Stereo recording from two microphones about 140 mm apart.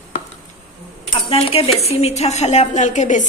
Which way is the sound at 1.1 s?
45° left (ahead or behind).